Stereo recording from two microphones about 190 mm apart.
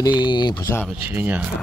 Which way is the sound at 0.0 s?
25° left (ahead or behind).